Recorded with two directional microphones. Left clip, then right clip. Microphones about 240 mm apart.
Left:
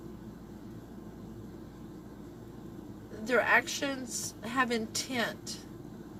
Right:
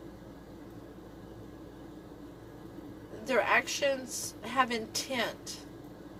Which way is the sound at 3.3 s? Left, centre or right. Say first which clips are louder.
Left 1 dB; centre.